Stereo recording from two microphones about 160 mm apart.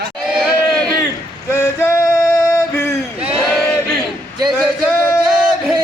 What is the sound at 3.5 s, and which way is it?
Crowd, 5° left (ahead or behind).